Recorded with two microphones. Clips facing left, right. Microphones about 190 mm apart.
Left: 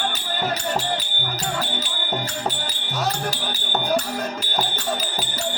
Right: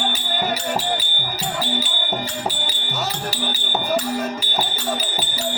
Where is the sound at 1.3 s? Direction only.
5° right (ahead or behind).